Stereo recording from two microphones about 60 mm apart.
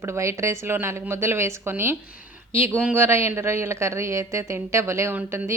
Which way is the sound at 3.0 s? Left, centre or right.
Right.